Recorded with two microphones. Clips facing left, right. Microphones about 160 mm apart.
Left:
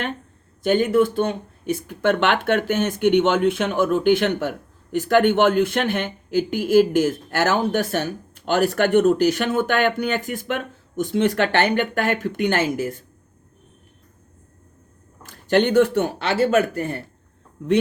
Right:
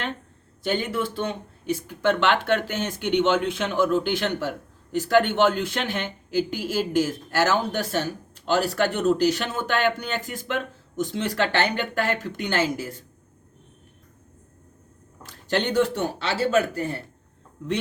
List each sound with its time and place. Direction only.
0.6 s speech: 50° left (ahead or behind)
15.2 s speech: 50° left (ahead or behind)